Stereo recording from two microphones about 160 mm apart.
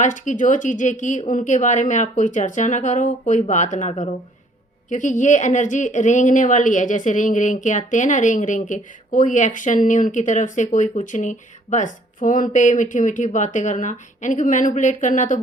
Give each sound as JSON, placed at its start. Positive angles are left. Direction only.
{"t": 0.0, "sound": "a woman's voice", "side_deg": 50}